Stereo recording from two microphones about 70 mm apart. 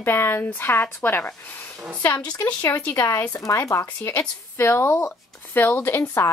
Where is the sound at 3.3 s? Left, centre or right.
Left.